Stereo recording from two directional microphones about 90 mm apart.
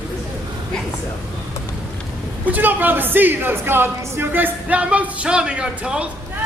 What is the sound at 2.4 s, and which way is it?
A woman's voice, 20° right (ahead or behind).